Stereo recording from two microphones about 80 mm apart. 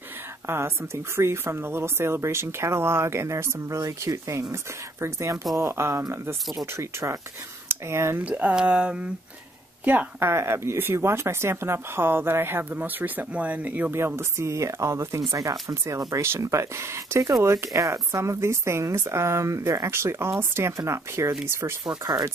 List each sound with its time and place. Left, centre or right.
0.5 s speech: right
8.3 s speech: centre
10.3 s speech: right
13.9 s speech: right
21.8 s speech: right